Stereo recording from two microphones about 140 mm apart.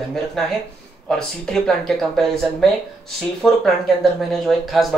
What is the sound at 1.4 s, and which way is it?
Speech, 5° left (ahead or behind).